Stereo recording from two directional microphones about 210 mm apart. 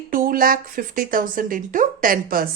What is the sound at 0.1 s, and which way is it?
A woman's voice, 40° right (ahead or behind).